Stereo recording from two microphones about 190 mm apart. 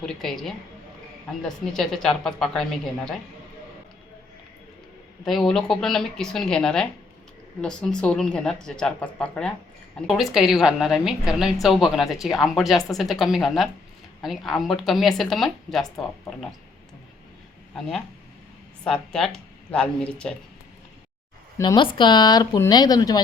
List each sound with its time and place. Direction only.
0.0 s a woman's voice: centre (ahead or behind)
5.2 s a woman's voice: centre (ahead or behind)
17.7 s a woman's voice: centre (ahead or behind)
21.6 s speech: 25° left (ahead or behind)